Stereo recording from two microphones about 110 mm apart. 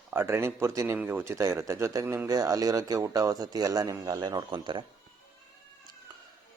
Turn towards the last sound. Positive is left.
turn(degrees=-45)  # may be behind; listen again after turning